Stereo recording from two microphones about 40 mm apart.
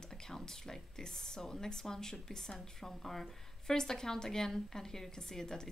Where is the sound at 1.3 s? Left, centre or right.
Centre.